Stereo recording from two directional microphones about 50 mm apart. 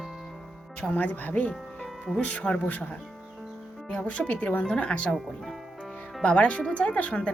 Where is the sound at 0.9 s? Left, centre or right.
Left.